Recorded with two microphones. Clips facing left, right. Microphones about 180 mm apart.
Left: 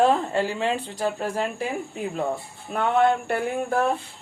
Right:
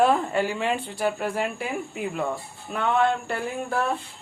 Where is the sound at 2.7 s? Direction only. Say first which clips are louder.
Left 2 dB; 45° left (ahead or behind).